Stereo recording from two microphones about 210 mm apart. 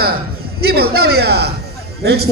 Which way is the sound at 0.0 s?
45° right (ahead or behind).